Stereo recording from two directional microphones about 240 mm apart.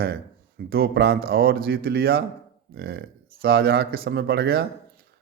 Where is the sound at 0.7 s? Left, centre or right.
Right.